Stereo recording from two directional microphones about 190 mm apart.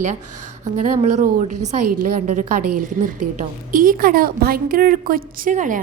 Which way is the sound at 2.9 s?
45° right (ahead or behind).